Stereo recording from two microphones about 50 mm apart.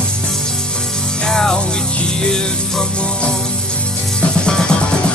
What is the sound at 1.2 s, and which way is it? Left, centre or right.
Music, centre.